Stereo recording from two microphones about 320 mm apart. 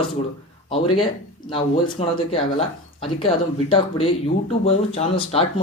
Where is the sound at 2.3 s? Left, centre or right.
Centre.